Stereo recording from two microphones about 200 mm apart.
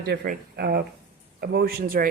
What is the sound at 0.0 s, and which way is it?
Speech, 55° right (ahead or behind).